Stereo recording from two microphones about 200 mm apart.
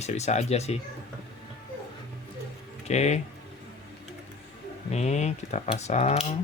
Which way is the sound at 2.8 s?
35° left (ahead or behind).